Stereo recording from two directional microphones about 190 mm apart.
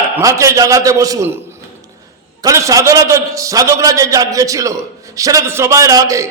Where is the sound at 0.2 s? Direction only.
15° right (ahead or behind).